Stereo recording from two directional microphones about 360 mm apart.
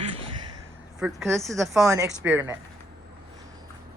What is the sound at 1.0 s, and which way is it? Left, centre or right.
A woman's voice, centre.